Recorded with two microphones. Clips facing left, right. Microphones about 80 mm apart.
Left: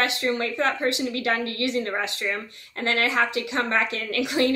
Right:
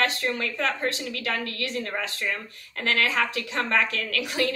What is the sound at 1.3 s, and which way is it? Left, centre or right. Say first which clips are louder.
Speech: left 3 dB; left.